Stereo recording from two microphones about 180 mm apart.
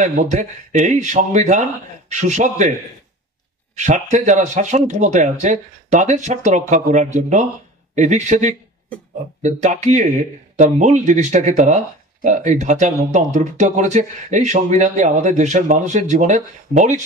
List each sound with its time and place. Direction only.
0.0 s a man's voice: 40° right (ahead or behind)